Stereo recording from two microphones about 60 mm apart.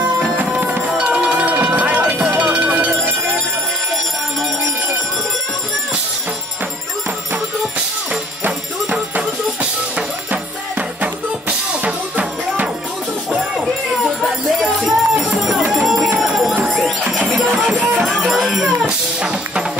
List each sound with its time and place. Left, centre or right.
0.6 s music: right
8.1 s music: right
14.6 s a sound: centre
15.7 s bell: centre
17.5 s music: centre
17.7 s music: right
18.0 s music: centre